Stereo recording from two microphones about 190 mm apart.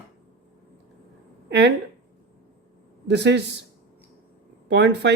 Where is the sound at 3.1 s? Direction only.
65° right (ahead or behind).